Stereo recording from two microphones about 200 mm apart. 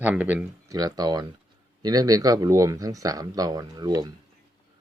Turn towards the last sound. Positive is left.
turn(degrees=-20)  # may be behind; listen again after turning